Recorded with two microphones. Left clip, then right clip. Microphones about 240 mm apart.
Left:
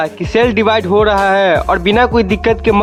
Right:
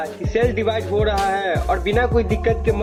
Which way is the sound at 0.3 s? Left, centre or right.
Left.